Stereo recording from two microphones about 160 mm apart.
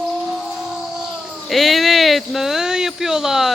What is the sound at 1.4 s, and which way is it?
Speech, centre (ahead or behind).